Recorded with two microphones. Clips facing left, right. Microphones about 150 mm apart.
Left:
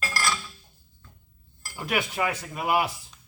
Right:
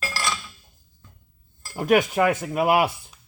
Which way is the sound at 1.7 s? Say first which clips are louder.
Right 10 dB; 45° right (ahead or behind).